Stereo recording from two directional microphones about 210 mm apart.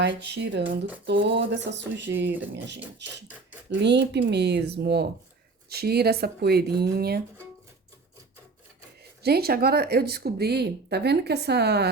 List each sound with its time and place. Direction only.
0.0 s a sound: 55° right (ahead or behind)
3.7 s speech: 55° right (ahead or behind)
9.2 s speech: 50° right (ahead or behind)